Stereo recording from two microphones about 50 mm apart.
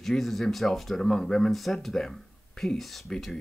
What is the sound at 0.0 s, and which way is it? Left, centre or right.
Speech, centre.